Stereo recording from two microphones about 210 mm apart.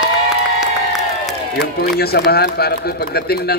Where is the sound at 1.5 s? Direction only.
50° left (ahead or behind).